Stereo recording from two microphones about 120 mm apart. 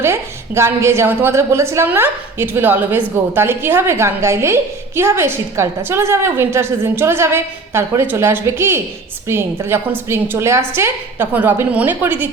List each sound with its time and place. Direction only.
0.0 s a woman's voice: 20° right (ahead or behind)